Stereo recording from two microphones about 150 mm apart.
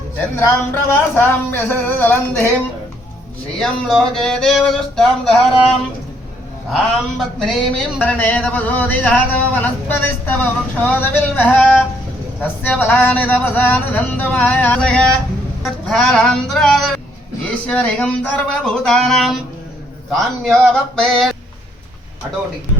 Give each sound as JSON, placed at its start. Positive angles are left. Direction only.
{"t": 0.3, "sound": "speech", "side_deg": 15}